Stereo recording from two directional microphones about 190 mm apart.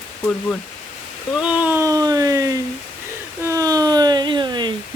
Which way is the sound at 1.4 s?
5° right (ahead or behind).